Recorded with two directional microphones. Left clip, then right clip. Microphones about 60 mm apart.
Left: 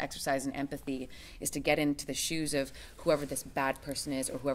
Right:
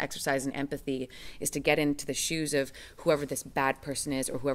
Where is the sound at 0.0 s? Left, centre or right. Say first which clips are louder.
Right 2 dB; right.